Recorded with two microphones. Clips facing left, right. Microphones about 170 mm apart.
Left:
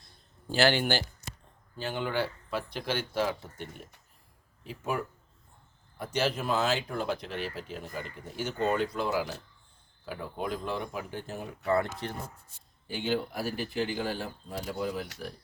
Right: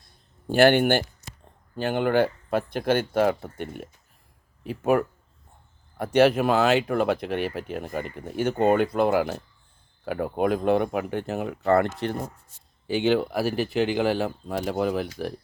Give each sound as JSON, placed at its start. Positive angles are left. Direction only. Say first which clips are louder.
{"t": 0.4, "sound": "speech", "louder": "right 8 dB", "side_deg": -55}